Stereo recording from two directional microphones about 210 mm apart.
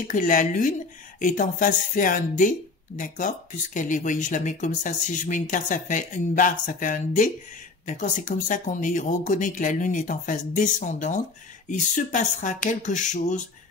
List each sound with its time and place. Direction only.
0.0 s speech: 40° left (ahead or behind)